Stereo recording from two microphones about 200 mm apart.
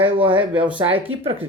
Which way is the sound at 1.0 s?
25° right (ahead or behind).